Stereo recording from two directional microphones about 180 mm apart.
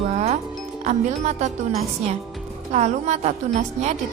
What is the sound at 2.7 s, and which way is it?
Speech, 40° right (ahead or behind).